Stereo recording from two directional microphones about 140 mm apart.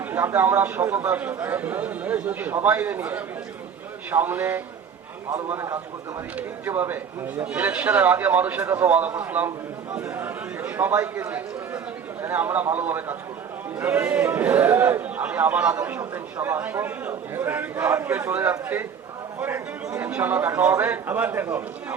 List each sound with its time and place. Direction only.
0.0 s a man's voice: 15° right (ahead or behind)